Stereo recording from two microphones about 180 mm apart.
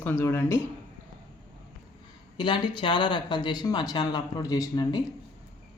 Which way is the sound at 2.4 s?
25° left (ahead or behind).